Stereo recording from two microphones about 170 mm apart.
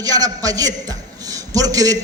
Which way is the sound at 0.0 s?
20° right (ahead or behind).